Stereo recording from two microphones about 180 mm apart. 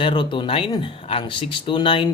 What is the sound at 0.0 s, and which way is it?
Speech, 25° left (ahead or behind).